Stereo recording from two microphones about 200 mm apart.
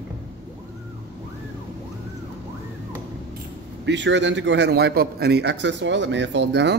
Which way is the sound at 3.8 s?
60° right (ahead or behind).